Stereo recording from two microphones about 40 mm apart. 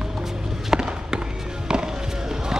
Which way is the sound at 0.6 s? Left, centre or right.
Centre.